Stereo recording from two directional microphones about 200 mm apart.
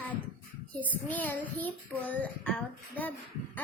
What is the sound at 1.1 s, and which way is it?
Child singing, 10° left (ahead or behind).